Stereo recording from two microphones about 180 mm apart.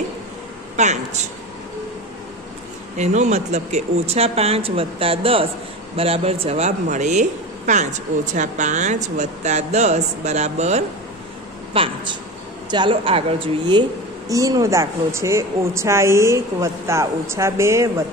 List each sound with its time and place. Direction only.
0.7 s speech: 40° right (ahead or behind)
3.0 s speech: 40° right (ahead or behind)
14.3 s speech: 20° right (ahead or behind)